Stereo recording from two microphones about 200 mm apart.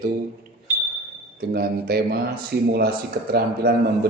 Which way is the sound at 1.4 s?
50° right (ahead or behind).